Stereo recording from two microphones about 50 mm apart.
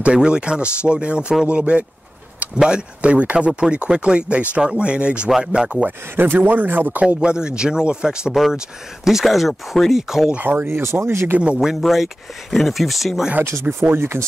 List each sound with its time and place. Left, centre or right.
0.0 s speech: centre
6.1 s a man's voice: right
7.2 s speech: centre
8.3 s speech: centre
10.4 s a man's voice: right
10.7 s speech: right
11.7 s speech: centre
13.5 s speech: right